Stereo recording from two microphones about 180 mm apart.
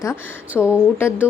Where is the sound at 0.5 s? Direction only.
10° left (ahead or behind).